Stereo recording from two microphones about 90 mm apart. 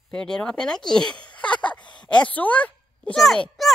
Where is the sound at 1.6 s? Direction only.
15° left (ahead or behind).